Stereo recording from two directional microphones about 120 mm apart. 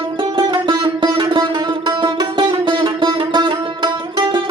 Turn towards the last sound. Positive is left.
turn(degrees=-40)  # may be behind; listen again after turning